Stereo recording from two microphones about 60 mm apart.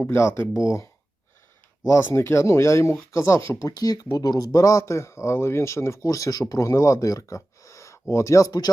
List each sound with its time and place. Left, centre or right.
0.0 s speech: left
1.9 s speech: left
3.6 s speech: left
6.0 s speech: left